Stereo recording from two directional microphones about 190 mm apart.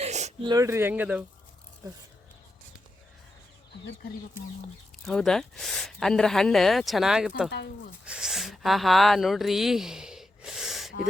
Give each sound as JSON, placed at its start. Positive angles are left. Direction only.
{"t": 0.0, "sound": "a sound", "side_deg": -35}
{"t": 0.4, "sound": "speech", "side_deg": -15}
{"t": 5.0, "sound": "speech", "side_deg": 0}